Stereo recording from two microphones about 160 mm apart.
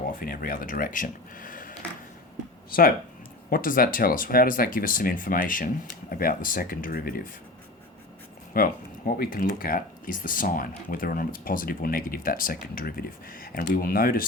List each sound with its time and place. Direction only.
0.1 s speech: 60° left (ahead or behind)
8.5 s speech: 65° left (ahead or behind)